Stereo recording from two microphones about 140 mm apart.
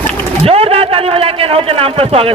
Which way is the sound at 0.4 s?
45° right (ahead or behind).